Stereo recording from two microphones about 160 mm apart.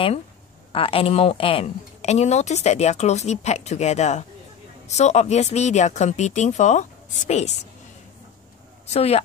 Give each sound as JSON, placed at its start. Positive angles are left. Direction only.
{"t": 0.7, "sound": "a woman's voice", "side_deg": 35}
{"t": 8.8, "sound": "speech", "side_deg": 40}